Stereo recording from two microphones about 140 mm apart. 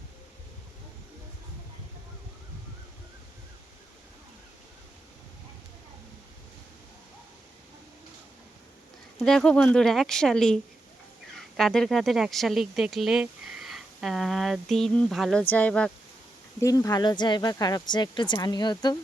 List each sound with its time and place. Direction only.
9.2 s speech: 5° left (ahead or behind)
16.6 s speech: 25° left (ahead or behind)